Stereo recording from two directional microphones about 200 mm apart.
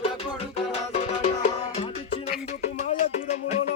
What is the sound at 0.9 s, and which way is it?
Music, 35° left (ahead or behind).